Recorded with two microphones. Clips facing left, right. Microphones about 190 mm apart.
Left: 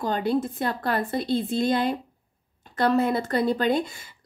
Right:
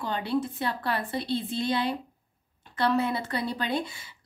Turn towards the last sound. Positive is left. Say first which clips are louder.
# left 6 dB
turn(degrees=45)  # may be behind; listen again after turning